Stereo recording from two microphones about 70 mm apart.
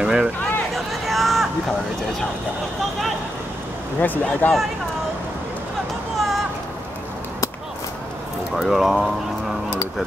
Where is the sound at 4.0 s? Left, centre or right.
Left.